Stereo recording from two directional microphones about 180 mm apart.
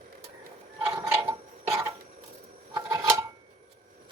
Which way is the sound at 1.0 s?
15° right (ahead or behind).